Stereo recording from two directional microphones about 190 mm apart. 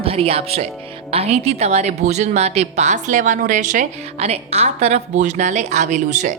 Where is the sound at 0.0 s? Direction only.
30° right (ahead or behind).